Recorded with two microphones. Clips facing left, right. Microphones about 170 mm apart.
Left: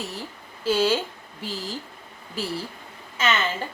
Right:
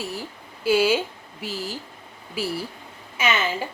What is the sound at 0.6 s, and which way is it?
A woman's voice, 10° right (ahead or behind).